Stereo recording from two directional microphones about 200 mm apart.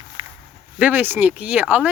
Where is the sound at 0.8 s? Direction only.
10° right (ahead or behind).